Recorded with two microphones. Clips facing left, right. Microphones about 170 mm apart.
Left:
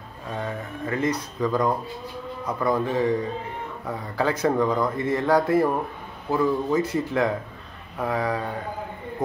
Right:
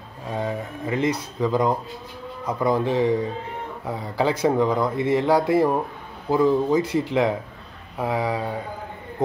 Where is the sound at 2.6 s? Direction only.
10° right (ahead or behind).